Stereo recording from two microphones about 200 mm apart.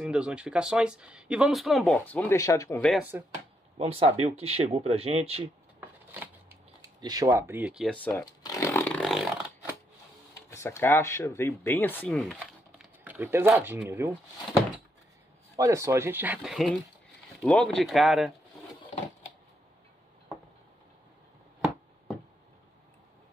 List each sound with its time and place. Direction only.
0.0 s speech: 5° right (ahead or behind); by 2.8 s 15° left (ahead or behind)
2.8 s speech: centre (ahead or behind)
3.7 s speech: 30° right (ahead or behind)
5.8 s shuffling cards: 10° right (ahead or behind)
7.0 s chainsaw: 20° right (ahead or behind); by 9.5 s centre (ahead or behind)
10.5 s speech: 15° left (ahead or behind)
13.0 s speech: 10° right (ahead or behind)
15.5 s speech: 15° right (ahead or behind)